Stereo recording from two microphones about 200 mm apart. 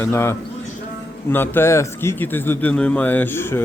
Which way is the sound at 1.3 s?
10° left (ahead or behind).